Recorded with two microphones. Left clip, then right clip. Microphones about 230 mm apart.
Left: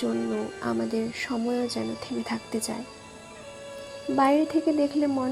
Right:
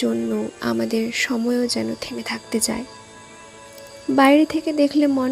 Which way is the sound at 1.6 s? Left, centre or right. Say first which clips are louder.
Right 7 dB; right.